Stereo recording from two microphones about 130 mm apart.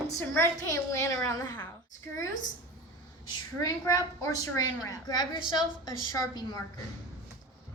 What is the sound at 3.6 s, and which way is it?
A woman's voice, 25° left (ahead or behind).